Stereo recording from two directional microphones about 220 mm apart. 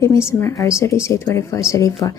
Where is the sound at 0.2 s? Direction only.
10° left (ahead or behind).